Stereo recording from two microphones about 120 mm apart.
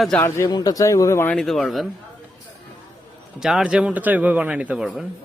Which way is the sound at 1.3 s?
5° left (ahead or behind).